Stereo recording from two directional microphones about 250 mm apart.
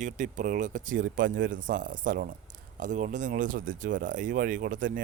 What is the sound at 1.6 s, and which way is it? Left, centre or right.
A man's voice, right.